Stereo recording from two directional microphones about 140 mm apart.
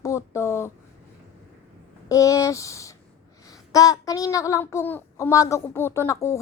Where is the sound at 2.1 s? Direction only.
20° left (ahead or behind).